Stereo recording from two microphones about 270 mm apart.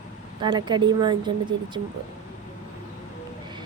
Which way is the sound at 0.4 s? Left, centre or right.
Centre.